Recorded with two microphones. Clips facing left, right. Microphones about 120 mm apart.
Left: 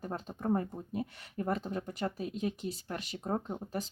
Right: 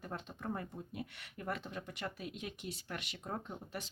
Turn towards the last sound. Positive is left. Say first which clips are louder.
# left 8 dB
turn(degrees=35)  # may be behind; listen again after turning